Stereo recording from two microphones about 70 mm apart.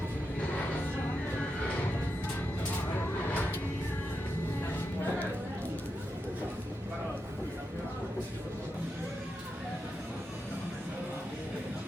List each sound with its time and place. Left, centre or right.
3.2 s music: left